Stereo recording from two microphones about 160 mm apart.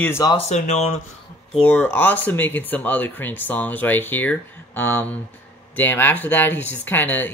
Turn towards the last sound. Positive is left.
turn(degrees=10)  # may be behind; listen again after turning